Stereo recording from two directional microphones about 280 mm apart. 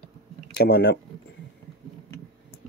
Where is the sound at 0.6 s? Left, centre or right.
Left.